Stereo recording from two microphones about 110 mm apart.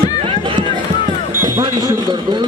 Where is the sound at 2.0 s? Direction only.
45° right (ahead or behind).